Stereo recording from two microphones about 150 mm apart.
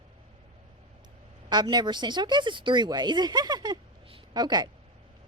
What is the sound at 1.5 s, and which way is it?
A woman's voice, 30° right (ahead or behind).